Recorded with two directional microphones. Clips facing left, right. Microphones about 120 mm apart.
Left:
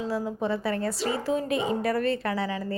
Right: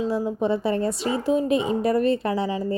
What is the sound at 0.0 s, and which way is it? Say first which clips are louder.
A woman's voice: right 5 dB; 20° right (ahead or behind).